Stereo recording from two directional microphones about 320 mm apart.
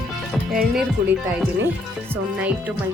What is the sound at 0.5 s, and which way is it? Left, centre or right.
Speech, centre.